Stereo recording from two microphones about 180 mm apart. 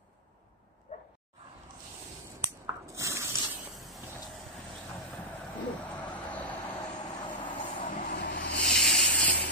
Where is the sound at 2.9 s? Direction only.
15° right (ahead or behind).